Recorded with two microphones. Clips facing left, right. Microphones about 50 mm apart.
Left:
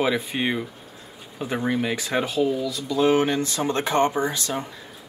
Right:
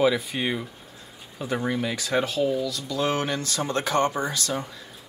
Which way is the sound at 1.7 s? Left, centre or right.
Left.